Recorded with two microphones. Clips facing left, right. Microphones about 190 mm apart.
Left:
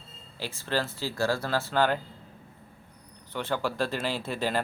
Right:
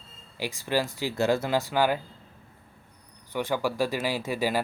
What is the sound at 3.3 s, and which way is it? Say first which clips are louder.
Speech: right 3 dB; 10° right (ahead or behind).